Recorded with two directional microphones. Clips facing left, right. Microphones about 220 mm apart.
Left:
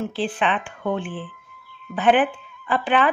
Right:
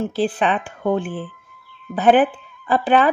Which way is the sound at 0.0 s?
40° right (ahead or behind).